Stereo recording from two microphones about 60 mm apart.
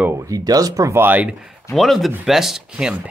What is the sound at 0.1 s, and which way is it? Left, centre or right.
Speech, right.